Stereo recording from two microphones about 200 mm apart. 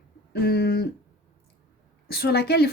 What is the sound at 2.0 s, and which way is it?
Speech, 50° left (ahead or behind).